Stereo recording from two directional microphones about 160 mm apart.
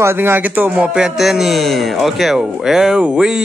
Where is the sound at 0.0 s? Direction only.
15° right (ahead or behind).